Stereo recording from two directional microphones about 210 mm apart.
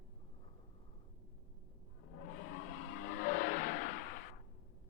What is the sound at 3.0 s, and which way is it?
Music, 40° left (ahead or behind).